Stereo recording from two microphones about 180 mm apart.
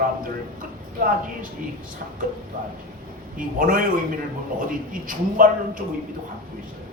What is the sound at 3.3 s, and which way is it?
A man's voice, 50° right (ahead or behind).